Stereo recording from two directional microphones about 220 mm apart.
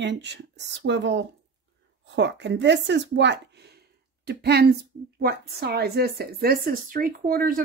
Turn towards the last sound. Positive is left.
turn(degrees=-40)  # may be behind; listen again after turning